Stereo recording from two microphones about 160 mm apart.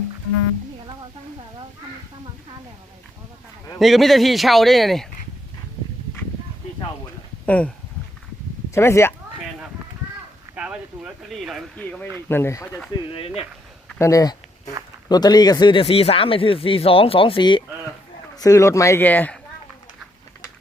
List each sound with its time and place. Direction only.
3.8 s speech: centre (ahead or behind)
7.4 s speech: 10° left (ahead or behind)
8.7 s speech: 15° left (ahead or behind)
10.5 s speech: 5° right (ahead or behind); by 12.8 s 15° left (ahead or behind)
13.1 s speech: 40° left (ahead or behind)
14.0 s speech: 20° left (ahead or behind)
18.3 s speech: 20° left (ahead or behind)